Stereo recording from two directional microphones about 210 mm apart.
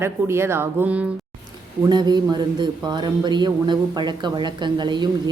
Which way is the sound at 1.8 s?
20° right (ahead or behind).